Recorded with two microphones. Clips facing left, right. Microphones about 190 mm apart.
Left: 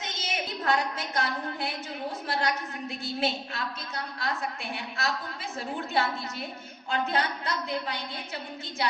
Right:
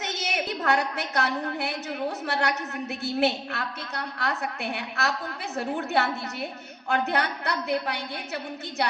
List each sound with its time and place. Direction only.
0.0 s a woman's voice: 70° right (ahead or behind)